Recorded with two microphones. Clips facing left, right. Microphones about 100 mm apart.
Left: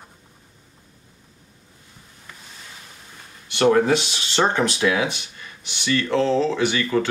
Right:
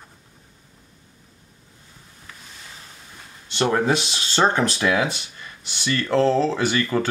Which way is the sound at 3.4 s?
25° right (ahead or behind).